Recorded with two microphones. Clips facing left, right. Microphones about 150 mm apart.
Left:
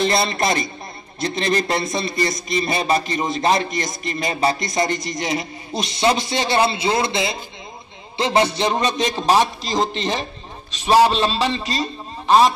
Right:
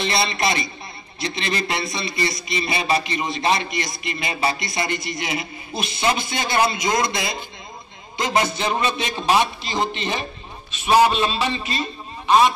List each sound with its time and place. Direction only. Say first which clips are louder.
0.0 s a man's voice: left 3 dB; 45° left (ahead or behind)